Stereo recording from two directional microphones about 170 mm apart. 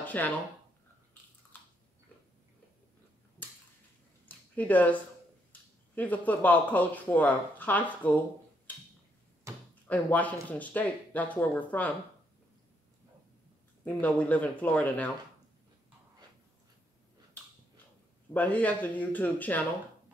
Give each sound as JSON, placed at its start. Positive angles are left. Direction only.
{"t": 0.0, "sound": "a sound", "side_deg": 10}
{"t": 4.6, "sound": "speech", "side_deg": 10}
{"t": 9.5, "sound": "a sound", "side_deg": -15}
{"t": 9.8, "sound": "speech", "side_deg": 10}
{"t": 13.8, "sound": "speech", "side_deg": 10}
{"t": 18.3, "sound": "speech", "side_deg": 10}